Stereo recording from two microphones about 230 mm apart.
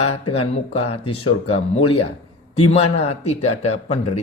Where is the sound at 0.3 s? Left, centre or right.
Left.